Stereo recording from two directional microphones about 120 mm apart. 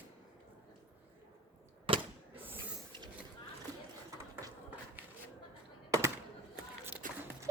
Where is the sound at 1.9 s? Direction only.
45° right (ahead or behind).